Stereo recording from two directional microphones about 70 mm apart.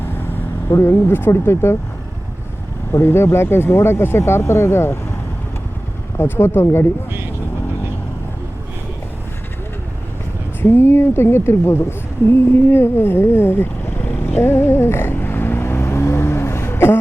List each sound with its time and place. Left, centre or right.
0.8 s speech: left
2.9 s speech: left
6.1 s speech: left
10.6 s speech: left
14.4 s vehicle: left